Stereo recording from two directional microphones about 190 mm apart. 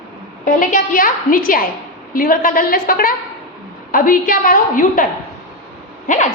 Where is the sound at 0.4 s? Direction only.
45° left (ahead or behind).